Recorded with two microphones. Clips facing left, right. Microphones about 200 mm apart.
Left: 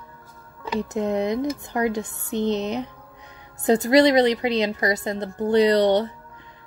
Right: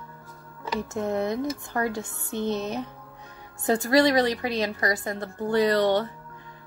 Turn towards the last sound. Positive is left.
turn(degrees=20)  # may be behind; listen again after turning